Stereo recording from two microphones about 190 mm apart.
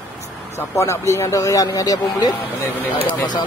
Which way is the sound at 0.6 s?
15° left (ahead or behind).